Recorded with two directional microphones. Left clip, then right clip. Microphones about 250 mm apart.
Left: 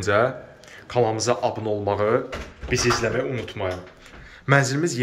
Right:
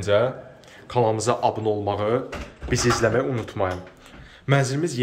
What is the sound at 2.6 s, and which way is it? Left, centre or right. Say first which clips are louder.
Speech: right 1 dB; centre.